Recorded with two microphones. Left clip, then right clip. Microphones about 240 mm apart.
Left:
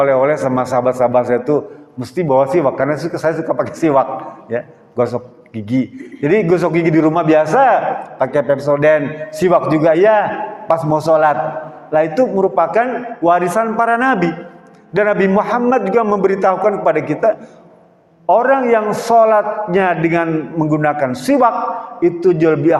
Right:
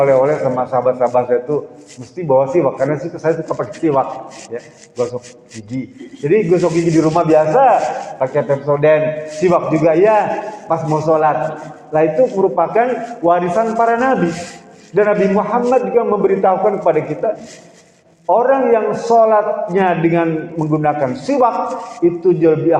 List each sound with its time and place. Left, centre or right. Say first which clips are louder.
0.0 s a man's voice: even; left
6.2 s a man's voice: even; left